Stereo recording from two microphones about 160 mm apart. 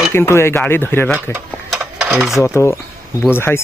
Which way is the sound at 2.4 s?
15° left (ahead or behind).